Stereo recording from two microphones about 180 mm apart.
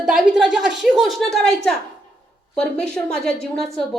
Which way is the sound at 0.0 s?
5° right (ahead or behind).